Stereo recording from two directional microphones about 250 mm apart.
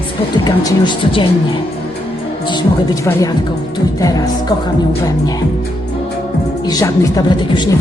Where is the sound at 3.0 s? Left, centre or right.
Centre.